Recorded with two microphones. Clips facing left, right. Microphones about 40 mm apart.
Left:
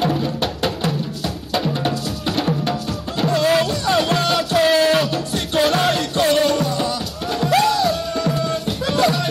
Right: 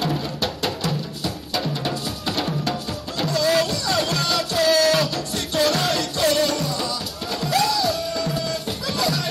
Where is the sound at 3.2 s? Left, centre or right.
Left.